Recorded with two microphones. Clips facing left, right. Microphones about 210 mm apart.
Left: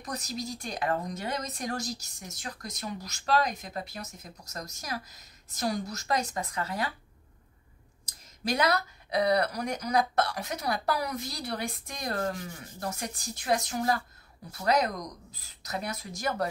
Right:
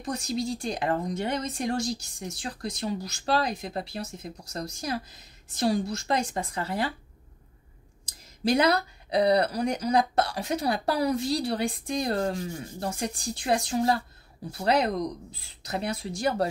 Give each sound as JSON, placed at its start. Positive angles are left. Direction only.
{"t": 0.0, "sound": "speech", "side_deg": -30}
{"t": 8.0, "sound": "speech", "side_deg": -30}